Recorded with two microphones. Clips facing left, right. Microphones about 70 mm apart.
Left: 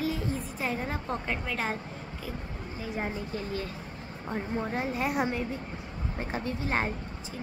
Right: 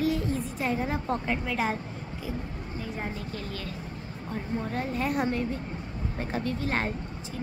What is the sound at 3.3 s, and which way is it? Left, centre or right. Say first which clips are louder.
A woman's voice: left 2 dB; left.